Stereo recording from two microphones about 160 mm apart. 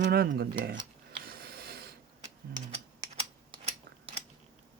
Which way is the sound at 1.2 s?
70° right (ahead or behind).